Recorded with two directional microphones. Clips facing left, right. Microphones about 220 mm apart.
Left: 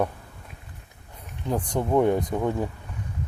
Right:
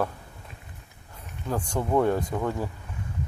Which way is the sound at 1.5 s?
15° left (ahead or behind).